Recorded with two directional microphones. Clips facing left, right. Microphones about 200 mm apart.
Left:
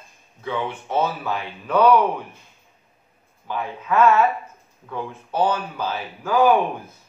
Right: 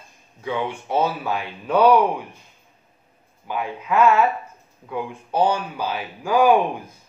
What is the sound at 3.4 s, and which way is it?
Speech, 10° right (ahead or behind).